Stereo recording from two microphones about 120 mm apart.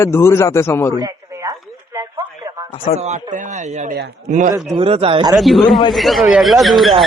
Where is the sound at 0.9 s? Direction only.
30° right (ahead or behind).